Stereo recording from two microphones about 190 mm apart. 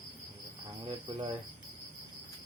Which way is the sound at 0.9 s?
25° right (ahead or behind).